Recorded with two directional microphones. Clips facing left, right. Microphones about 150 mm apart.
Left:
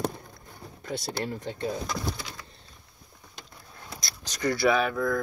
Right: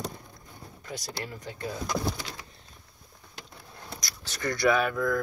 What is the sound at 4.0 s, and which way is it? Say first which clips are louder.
Speech: left 4 dB; 15° left (ahead or behind).